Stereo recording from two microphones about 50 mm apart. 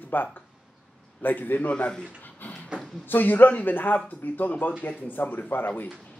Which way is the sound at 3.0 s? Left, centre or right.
Left.